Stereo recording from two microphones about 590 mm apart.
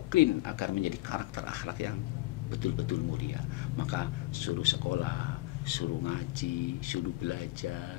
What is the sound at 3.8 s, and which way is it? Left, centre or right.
Speech, left.